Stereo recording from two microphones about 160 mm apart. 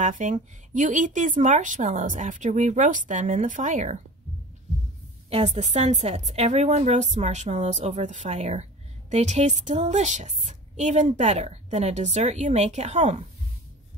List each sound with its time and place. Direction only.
0.0 s a woman's voice: 50° right (ahead or behind)
5.3 s a woman's voice: 40° right (ahead or behind)